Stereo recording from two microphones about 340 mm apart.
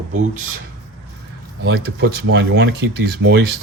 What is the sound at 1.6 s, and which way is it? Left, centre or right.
Speech, right.